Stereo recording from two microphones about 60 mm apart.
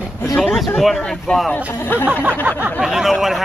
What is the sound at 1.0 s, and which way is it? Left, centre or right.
Speech, centre.